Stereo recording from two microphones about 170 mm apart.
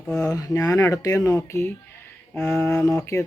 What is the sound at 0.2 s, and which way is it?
Speech, 20° left (ahead or behind).